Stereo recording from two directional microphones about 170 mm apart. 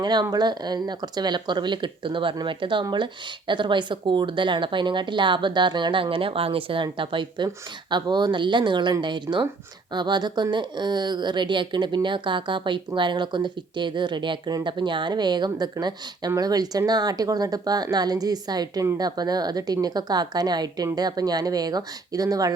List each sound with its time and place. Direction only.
0.0 s speech: 25° right (ahead or behind)